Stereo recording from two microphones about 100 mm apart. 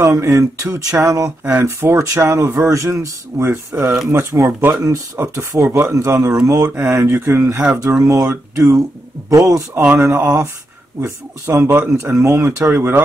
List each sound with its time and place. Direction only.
0.0 s speech: 30° right (ahead or behind)
9.3 s speech: 35° right (ahead or behind)